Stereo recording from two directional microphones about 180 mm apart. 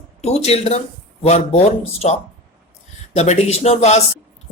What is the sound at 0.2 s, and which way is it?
A man's voice, 35° left (ahead or behind).